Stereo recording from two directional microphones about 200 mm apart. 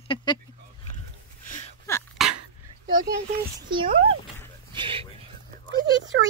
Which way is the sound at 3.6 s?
25° right (ahead or behind).